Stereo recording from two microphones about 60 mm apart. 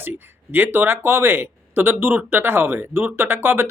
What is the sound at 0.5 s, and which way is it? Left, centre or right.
Speech, right.